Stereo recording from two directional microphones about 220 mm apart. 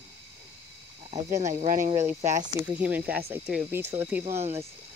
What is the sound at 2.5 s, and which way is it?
Speech, 10° right (ahead or behind).